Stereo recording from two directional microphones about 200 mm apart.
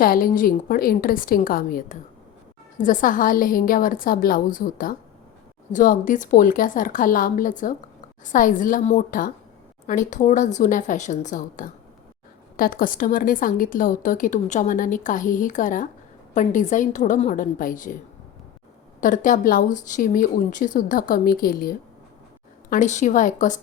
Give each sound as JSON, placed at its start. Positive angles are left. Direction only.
{"t": 0.0, "sound": "a woman's voice", "side_deg": 45}
{"t": 18.9, "sound": "a woman's voice", "side_deg": 40}